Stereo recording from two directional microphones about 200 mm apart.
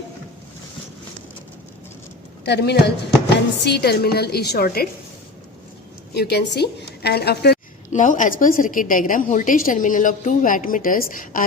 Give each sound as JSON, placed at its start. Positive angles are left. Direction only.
{"t": 2.4, "sound": "a woman's voice", "side_deg": 55}
{"t": 6.1, "sound": "a woman's voice", "side_deg": 55}
{"t": 7.9, "sound": "a woman's voice", "side_deg": 40}